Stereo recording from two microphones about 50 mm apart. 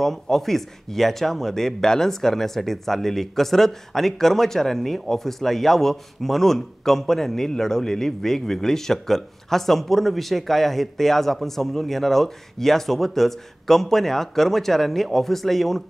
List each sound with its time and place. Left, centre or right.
0.0 s speech: centre